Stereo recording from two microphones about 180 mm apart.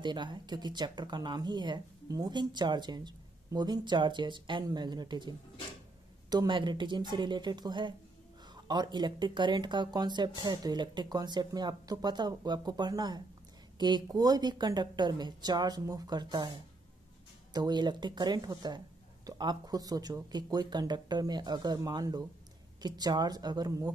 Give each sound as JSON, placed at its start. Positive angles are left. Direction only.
{"t": 0.0, "sound": "speech", "side_deg": -25}
{"t": 6.3, "sound": "speech", "side_deg": -25}